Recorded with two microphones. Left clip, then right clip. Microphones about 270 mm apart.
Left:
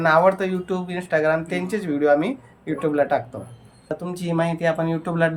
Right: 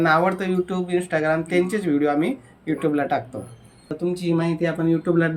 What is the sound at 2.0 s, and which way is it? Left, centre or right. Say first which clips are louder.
Speech: left 7 dB; left.